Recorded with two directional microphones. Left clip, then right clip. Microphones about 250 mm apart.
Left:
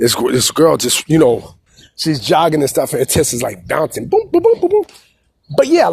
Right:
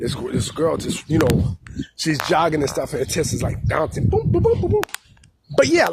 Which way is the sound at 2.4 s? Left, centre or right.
Left.